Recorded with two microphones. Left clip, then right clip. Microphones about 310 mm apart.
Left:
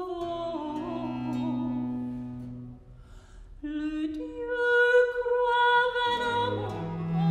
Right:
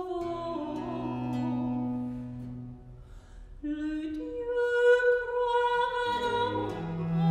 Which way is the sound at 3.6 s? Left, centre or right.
Left.